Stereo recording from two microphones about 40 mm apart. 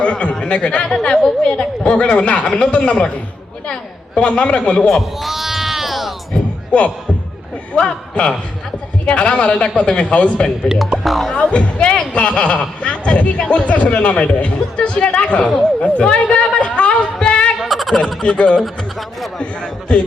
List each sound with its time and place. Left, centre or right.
0.0 s a man's voice: left
4.1 s speech: left
5.2 s sheep: centre
6.7 s speech: left
10.9 s speech: centre
11.4 s a man's voice: left
15.8 s a sound: left
17.6 s a sound: centre
18.2 s speech: left
18.6 s speech: centre
19.9 s speech: left